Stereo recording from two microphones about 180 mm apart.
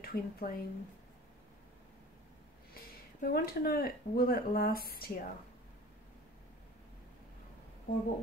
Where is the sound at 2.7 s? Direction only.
55° left (ahead or behind).